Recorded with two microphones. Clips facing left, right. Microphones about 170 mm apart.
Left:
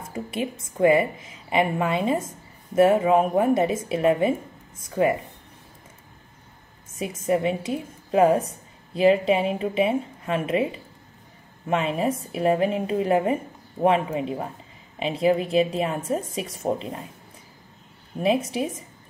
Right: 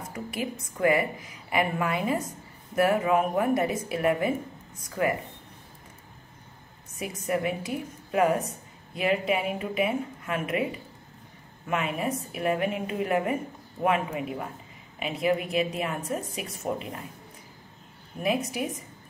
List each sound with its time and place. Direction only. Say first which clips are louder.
0.1 s a woman's voice: left 5 dB; 25° left (ahead or behind)
6.9 s a woman's voice: left 6 dB; 25° left (ahead or behind)
18.2 s a woman's voice: left 5 dB; 30° left (ahead or behind)